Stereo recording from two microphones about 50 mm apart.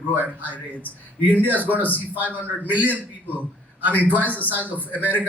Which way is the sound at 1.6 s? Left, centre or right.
Right.